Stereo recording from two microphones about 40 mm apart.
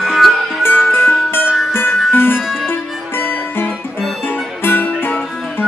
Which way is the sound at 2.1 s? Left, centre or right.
Left.